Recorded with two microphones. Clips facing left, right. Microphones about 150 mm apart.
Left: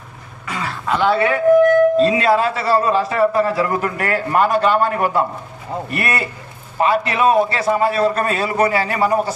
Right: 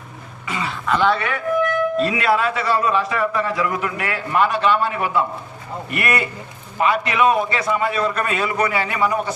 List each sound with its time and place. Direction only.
0.4 s throat clearing: centre (ahead or behind)
1.2 s speech: 30° left (ahead or behind)